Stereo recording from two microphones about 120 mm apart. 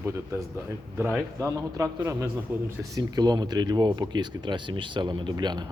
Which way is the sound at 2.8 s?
30° right (ahead or behind).